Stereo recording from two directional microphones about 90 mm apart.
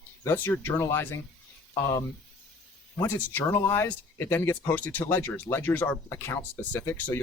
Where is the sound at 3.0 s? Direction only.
25° left (ahead or behind).